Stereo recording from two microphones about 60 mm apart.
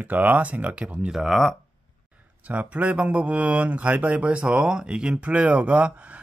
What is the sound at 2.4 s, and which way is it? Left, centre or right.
Speech, right.